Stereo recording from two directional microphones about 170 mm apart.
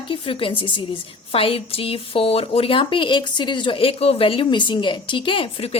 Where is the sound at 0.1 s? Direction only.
30° left (ahead or behind).